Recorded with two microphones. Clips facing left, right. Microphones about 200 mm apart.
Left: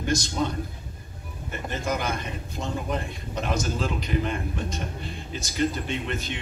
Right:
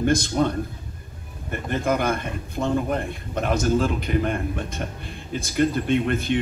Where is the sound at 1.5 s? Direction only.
55° right (ahead or behind).